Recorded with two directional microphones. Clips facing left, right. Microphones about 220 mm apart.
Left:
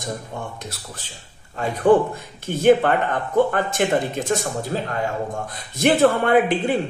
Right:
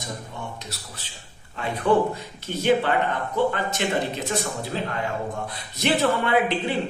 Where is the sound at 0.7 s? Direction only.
50° left (ahead or behind).